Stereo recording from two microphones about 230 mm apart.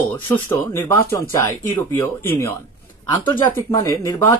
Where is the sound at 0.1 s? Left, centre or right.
Centre.